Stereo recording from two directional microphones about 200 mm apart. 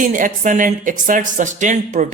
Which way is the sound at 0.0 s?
40° right (ahead or behind).